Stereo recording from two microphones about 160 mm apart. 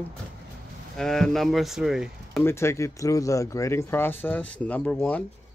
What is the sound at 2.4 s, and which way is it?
Speech, 15° left (ahead or behind).